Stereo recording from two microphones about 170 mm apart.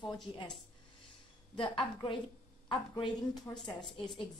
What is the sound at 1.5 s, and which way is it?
A woman's voice, 30° left (ahead or behind).